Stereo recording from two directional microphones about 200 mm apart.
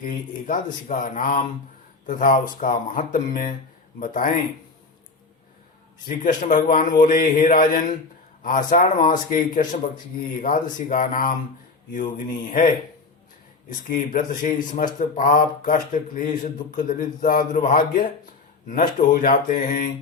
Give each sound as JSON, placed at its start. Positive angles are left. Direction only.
{"t": 0.0, "sound": "speech", "side_deg": 45}
{"t": 6.1, "sound": "speech", "side_deg": 40}
{"t": 10.4, "sound": "speech", "side_deg": 40}